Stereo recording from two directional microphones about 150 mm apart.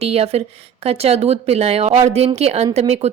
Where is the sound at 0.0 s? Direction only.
40° right (ahead or behind).